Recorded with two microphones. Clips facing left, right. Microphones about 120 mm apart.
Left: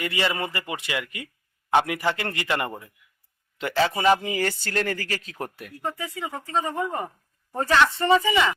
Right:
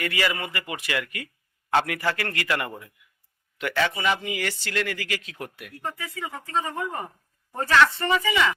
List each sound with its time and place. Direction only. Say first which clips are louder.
0.0 s speech: left 1 dB; 25° left (ahead or behind)
5.8 s speech: left 2 dB; 25° left (ahead or behind)